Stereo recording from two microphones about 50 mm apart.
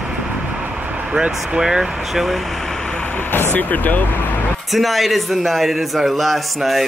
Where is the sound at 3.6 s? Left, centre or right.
Left.